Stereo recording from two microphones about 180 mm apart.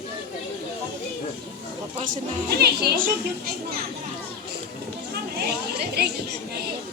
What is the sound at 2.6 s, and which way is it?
Speech, 60° right (ahead or behind).